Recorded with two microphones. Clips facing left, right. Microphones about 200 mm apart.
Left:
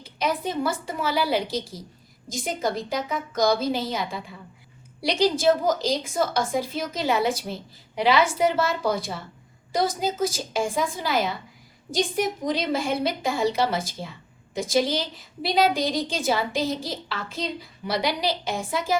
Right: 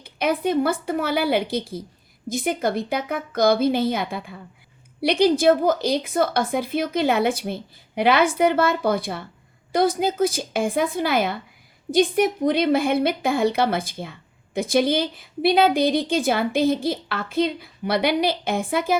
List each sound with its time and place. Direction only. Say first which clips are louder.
0.0 s a woman's voice: right 4 dB; 60° right (ahead or behind)